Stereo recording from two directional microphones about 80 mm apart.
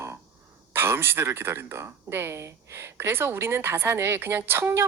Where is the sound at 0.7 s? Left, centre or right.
Right.